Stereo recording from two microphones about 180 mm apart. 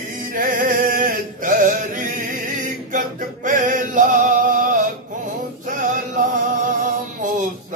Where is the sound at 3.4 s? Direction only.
45° right (ahead or behind).